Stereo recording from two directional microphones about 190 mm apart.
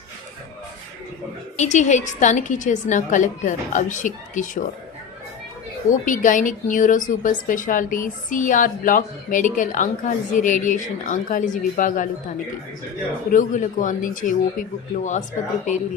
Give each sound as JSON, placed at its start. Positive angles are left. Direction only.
{"t": 1.5, "sound": "a woman's voice", "side_deg": 40}
{"t": 5.9, "sound": "speech", "side_deg": 45}
{"t": 13.3, "sound": "speech", "side_deg": 45}